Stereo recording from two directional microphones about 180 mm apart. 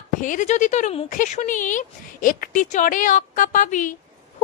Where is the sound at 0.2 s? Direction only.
45° left (ahead or behind).